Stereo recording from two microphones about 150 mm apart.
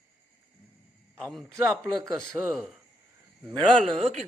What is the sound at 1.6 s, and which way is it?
Speech, 15° right (ahead or behind).